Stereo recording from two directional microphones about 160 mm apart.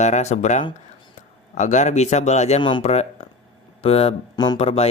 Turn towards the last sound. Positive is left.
turn(degrees=40)  # may be behind; listen again after turning